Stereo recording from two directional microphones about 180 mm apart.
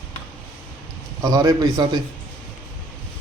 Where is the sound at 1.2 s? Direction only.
20° right (ahead or behind).